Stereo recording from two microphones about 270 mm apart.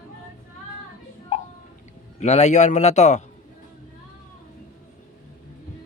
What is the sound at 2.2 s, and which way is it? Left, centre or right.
A man's voice, left.